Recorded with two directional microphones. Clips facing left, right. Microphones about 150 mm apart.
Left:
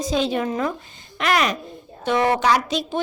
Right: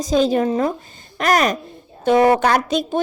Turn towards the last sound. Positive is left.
turn(degrees=-50)  # may be behind; listen again after turning